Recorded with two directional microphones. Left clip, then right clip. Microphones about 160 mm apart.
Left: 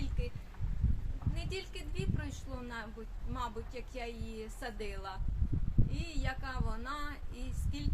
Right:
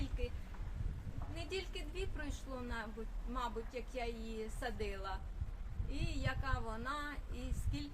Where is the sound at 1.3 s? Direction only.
10° left (ahead or behind).